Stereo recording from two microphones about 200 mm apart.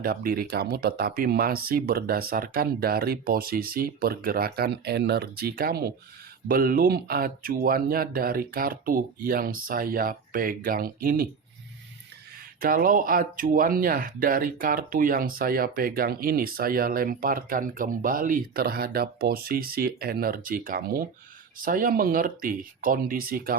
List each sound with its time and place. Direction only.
0.0 s speech: 50° right (ahead or behind)
12.5 s speech: 45° right (ahead or behind)